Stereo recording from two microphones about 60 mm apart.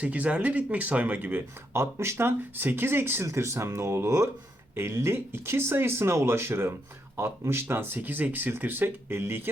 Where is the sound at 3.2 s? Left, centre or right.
Right.